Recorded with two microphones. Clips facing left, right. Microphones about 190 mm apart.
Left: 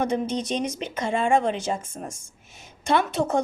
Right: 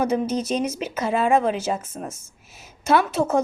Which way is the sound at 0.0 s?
5° right (ahead or behind).